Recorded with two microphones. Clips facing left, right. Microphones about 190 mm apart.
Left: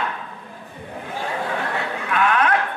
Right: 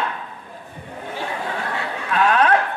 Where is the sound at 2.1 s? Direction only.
35° right (ahead or behind).